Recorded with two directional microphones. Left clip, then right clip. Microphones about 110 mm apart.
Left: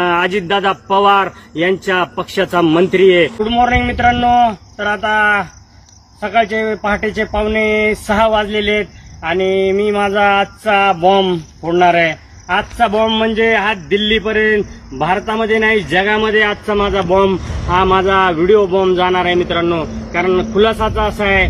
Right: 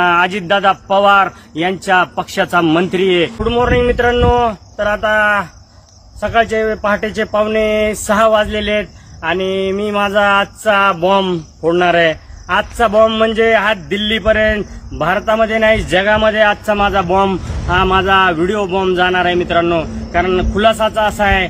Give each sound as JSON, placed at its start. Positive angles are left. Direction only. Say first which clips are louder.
{"t": 0.0, "sound": "a man's voice", "louder": "right 2 dB", "side_deg": -40}
{"t": 3.5, "sound": "speech", "louder": "right 1 dB", "side_deg": -60}